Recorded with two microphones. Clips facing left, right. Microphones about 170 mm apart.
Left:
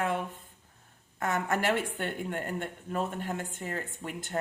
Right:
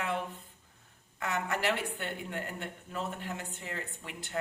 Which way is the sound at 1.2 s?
50° left (ahead or behind).